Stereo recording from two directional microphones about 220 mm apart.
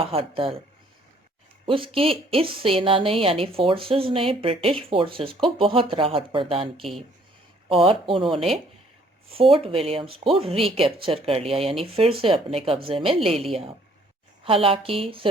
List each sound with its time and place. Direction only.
0.0 s a woman's voice: 25° right (ahead or behind)
1.6 s a woman's voice: 25° right (ahead or behind)